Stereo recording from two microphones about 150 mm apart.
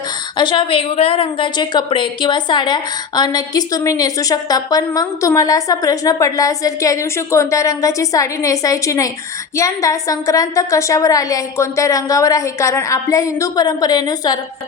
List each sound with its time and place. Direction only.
0.3 s a woman's voice: 35° left (ahead or behind)